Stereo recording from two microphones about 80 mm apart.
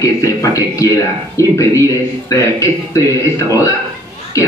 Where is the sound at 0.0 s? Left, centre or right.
Left.